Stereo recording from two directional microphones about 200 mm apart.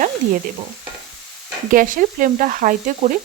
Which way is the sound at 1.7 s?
45° right (ahead or behind).